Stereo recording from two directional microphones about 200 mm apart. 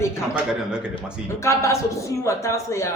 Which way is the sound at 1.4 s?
15° left (ahead or behind).